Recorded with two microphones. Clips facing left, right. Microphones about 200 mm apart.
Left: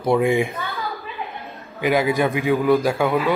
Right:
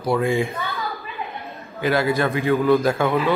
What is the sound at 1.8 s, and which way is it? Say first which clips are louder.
A man's voice: left 1 dB; 15° left (ahead or behind).